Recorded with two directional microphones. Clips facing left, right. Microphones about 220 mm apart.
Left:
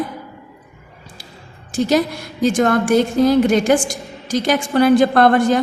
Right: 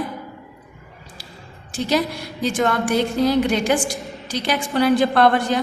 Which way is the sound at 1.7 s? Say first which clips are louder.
Left 5 dB; 45° left (ahead or behind).